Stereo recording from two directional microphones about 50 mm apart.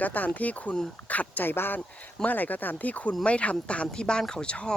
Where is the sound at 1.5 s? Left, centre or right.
Left.